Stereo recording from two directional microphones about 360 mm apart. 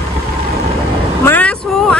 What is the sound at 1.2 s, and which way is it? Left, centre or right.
Vehicle, centre.